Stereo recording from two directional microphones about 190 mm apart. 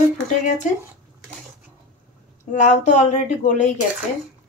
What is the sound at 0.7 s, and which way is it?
Speech, 40° left (ahead or behind).